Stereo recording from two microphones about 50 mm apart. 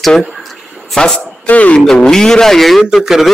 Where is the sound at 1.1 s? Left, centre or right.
Left.